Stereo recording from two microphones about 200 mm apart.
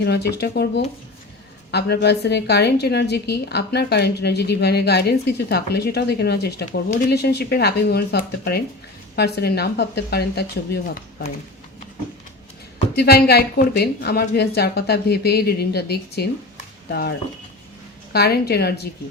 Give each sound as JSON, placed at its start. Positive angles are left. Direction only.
{"t": 0.0, "sound": "a woman's voice", "side_deg": 55}
{"t": 1.7, "sound": "a woman's voice", "side_deg": 55}
{"t": 13.0, "sound": "a woman's voice", "side_deg": 50}